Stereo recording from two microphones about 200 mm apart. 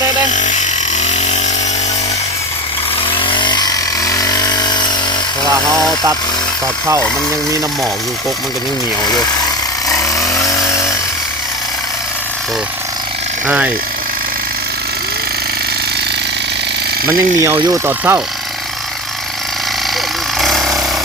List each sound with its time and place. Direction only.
0.3 s chainsaw: 40° left (ahead or behind)
3.1 s chainsaw: 25° left (ahead or behind)
9.9 s chainsaw: 15° left (ahead or behind)
17.1 s speech: 15° right (ahead or behind)
20.4 s engine: centre (ahead or behind)